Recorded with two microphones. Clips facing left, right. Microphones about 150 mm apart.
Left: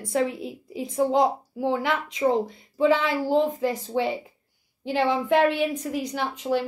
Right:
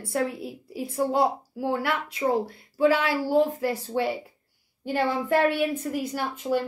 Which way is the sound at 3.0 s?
20° left (ahead or behind).